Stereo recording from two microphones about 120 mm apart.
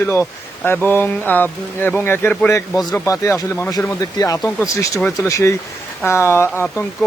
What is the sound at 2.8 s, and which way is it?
Speech, 30° left (ahead or behind).